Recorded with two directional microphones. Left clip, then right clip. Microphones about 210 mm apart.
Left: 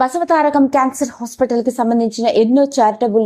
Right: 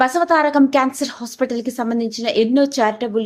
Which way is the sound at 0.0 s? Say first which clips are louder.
Left 1 dB; 20° left (ahead or behind).